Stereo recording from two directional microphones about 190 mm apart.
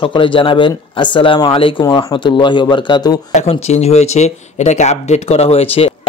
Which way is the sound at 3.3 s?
35° left (ahead or behind).